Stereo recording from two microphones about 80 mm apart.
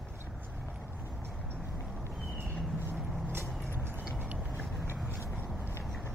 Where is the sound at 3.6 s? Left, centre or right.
Right.